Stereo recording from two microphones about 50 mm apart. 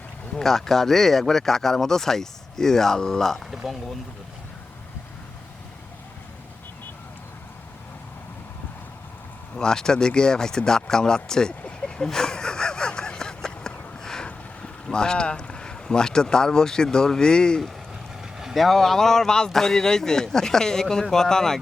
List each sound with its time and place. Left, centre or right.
0.3 s speech: centre
3.5 s speech: centre
9.6 s speech: centre
11.6 s vehicle: centre
12.0 s a sound: centre
14.8 s speech: centre
18.2 s speech: centre